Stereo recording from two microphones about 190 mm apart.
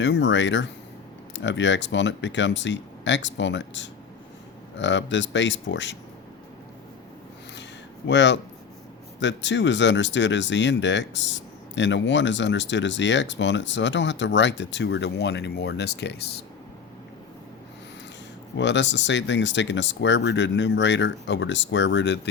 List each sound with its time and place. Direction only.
0.0 s speech: 70° left (ahead or behind)
8.0 s speech: 70° left (ahead or behind)
18.5 s speech: 70° left (ahead or behind)